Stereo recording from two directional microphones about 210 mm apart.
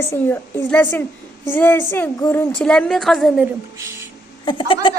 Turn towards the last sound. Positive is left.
turn(degrees=25)  # may be behind; listen again after turning